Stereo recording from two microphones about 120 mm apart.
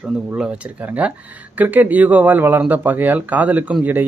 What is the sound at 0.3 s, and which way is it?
Speech, 10° right (ahead or behind).